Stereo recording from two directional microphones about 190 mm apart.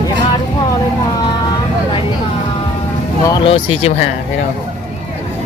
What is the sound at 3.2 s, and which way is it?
Speech, 25° left (ahead or behind).